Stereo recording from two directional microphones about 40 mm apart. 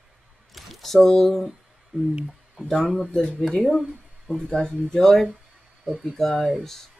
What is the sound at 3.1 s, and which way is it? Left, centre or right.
Speech, centre.